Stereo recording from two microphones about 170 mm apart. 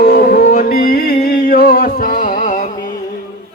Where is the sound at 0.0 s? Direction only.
55° left (ahead or behind).